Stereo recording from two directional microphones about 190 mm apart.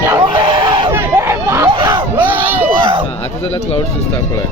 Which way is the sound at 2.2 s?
10° right (ahead or behind).